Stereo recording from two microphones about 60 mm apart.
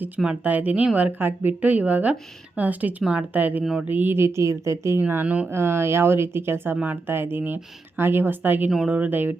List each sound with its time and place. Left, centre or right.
0.4 s speech: right
3.6 s speech: centre
3.8 s speech: right
4.9 s speech: right
5.2 s speech: right
5.5 s speech: right